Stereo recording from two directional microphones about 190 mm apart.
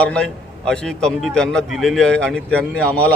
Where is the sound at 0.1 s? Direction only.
5° left (ahead or behind).